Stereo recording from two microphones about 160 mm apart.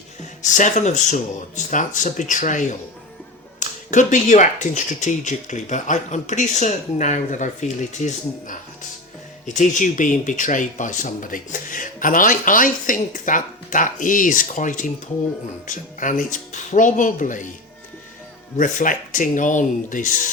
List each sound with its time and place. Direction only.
0.2 s speech: 50° left (ahead or behind)
18.5 s speech: 55° left (ahead or behind)